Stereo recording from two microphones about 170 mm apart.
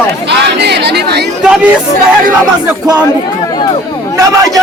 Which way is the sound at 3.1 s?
20° left (ahead or behind).